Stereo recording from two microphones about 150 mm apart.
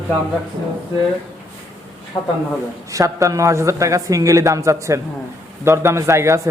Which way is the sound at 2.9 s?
20° right (ahead or behind).